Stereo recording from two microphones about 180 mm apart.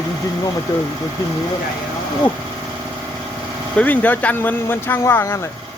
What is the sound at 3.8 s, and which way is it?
Speech, 10° left (ahead or behind).